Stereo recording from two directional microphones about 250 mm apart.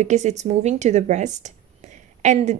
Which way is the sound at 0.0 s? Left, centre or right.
Right.